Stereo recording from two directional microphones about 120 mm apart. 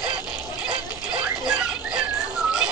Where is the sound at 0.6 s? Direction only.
10° right (ahead or behind).